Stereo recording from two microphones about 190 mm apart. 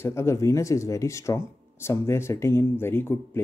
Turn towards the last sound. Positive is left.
turn(degrees=10)  # may be behind; listen again after turning